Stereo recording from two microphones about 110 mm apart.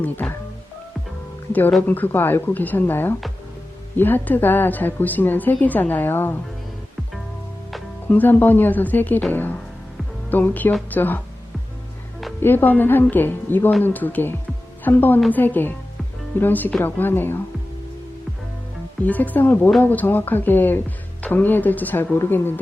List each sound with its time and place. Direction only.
0.0 s speech: 15° left (ahead or behind)
1.9 s speech: 20° left (ahead or behind)
8.1 s speech: 15° left (ahead or behind)
12.4 s speech: 20° left (ahead or behind)
19.0 s speech: 15° left (ahead or behind)